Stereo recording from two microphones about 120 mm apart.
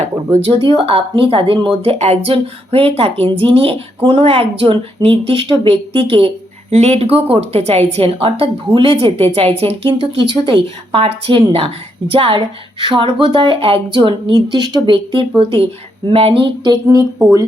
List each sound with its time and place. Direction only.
0.3 s speech: 55° right (ahead or behind)